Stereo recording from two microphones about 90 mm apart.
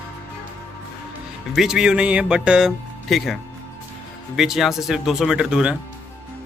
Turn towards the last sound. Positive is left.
turn(degrees=-10)  # may be behind; listen again after turning